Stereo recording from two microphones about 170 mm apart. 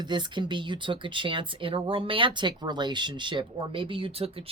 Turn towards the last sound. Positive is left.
turn(degrees=-35)  # may be behind; listen again after turning